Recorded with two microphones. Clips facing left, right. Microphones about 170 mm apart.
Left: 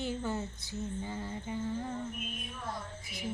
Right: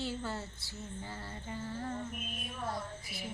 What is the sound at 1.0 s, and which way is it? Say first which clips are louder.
Music: left 5 dB; 15° left (ahead or behind).